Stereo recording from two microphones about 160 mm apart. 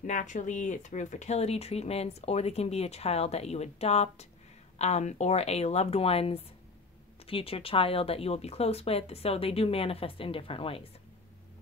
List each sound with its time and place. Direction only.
0.0 s speech: 50° left (ahead or behind); by 10.9 s 35° left (ahead or behind)